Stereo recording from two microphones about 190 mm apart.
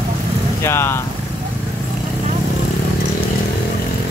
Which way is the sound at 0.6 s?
15° left (ahead or behind).